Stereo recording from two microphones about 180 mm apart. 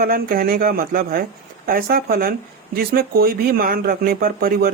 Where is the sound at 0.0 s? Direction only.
55° right (ahead or behind).